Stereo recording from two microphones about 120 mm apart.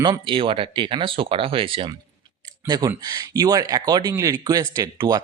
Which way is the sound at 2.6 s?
35° right (ahead or behind).